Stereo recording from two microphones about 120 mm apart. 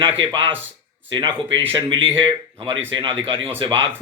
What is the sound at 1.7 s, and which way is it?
Speech, 45° right (ahead or behind).